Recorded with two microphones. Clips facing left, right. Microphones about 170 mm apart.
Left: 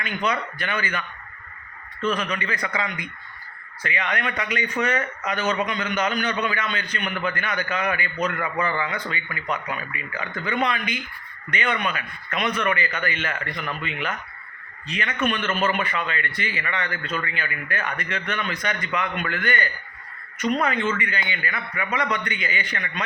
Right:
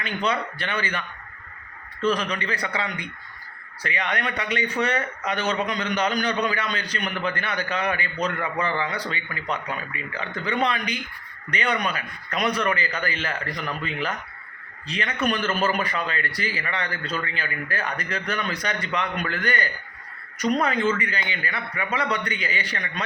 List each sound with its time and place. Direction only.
0.0 s a man's voice: 30° right (ahead or behind)